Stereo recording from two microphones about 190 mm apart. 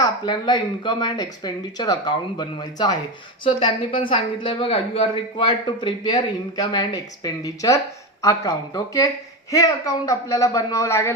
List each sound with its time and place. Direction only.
0.0 s a woman's voice: 20° left (ahead or behind)